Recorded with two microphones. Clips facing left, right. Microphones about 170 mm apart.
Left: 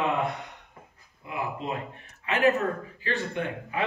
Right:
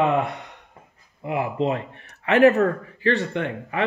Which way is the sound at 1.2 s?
70° right (ahead or behind).